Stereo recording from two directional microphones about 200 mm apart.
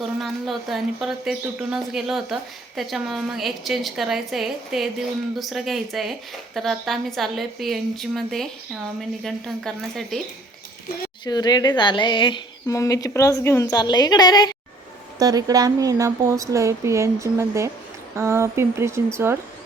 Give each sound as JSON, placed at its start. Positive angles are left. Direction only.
{"t": 0.2, "sound": "speech", "side_deg": 0}
{"t": 11.3, "sound": "a woman's voice", "side_deg": 20}
{"t": 15.2, "sound": "a woman's voice", "side_deg": -20}